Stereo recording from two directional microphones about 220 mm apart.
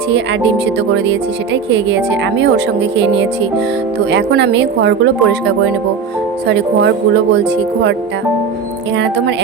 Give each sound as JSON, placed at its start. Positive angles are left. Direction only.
{"t": 4.1, "sound": "speech", "side_deg": -50}